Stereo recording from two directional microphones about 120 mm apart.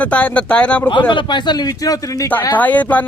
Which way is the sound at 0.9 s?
40° left (ahead or behind).